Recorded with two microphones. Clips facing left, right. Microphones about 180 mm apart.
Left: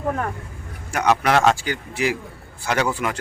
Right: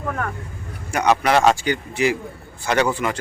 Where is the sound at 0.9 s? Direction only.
Centre (ahead or behind).